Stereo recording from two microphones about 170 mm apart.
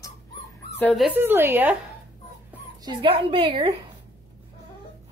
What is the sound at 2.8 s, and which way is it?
Speech, 30° right (ahead or behind).